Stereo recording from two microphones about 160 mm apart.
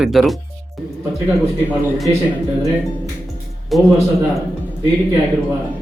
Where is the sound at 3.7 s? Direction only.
Centre (ahead or behind).